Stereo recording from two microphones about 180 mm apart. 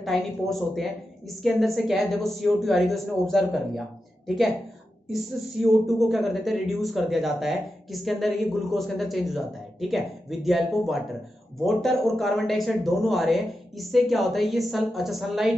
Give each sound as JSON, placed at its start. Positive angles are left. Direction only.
{"t": 0.0, "sound": "speech", "side_deg": 0}
{"t": 5.1, "sound": "speech", "side_deg": 0}